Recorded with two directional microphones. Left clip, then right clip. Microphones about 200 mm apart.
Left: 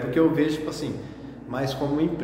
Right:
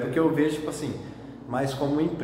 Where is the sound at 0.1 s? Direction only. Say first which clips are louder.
Left 3 dB; centre (ahead or behind).